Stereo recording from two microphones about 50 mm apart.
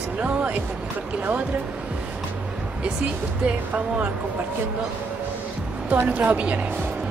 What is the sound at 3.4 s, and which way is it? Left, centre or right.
Speech, right.